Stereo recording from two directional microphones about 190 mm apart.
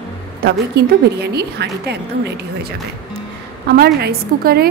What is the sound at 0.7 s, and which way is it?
A woman's voice, 60° right (ahead or behind).